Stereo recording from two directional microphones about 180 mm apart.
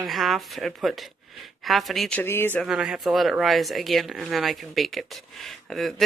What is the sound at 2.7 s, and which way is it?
Speech, 5° right (ahead or behind).